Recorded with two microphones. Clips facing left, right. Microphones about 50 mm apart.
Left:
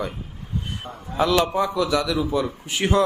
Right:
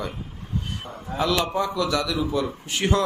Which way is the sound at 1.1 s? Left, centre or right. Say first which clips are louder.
Left 3 dB; centre.